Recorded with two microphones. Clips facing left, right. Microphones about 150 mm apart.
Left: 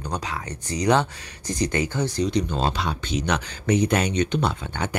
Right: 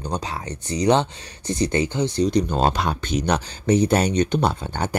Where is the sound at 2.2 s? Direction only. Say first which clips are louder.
Right 5 dB; 45° right (ahead or behind).